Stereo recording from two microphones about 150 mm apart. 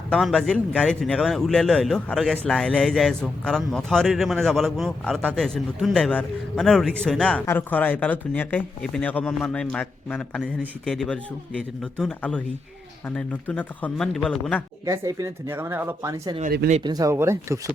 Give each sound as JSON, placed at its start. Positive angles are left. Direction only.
{"t": 0.1, "sound": "a man's voice", "side_deg": 0}
{"t": 14.8, "sound": "speech", "side_deg": -20}